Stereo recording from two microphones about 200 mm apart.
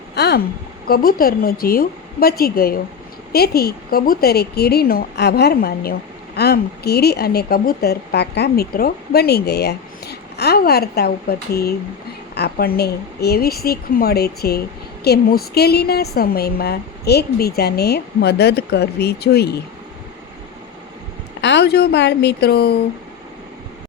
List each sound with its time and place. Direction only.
0.1 s a sound: 55° left (ahead or behind)
0.9 s a woman's voice: 50° left (ahead or behind)
21.4 s speech: 60° left (ahead or behind)